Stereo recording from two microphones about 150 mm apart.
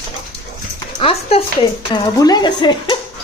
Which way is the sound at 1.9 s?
25° left (ahead or behind).